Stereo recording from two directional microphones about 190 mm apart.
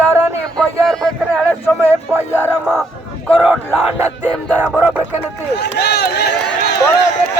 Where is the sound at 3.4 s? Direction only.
10° right (ahead or behind).